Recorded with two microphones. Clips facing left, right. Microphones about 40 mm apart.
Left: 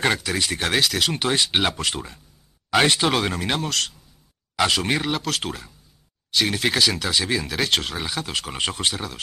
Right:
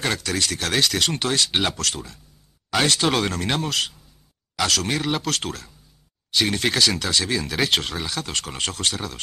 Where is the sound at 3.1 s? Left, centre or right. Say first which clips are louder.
Even; centre.